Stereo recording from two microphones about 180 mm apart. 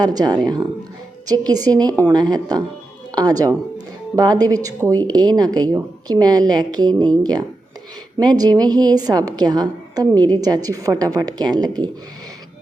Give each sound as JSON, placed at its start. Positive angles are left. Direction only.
{"t": 0.0, "sound": "speech", "side_deg": -20}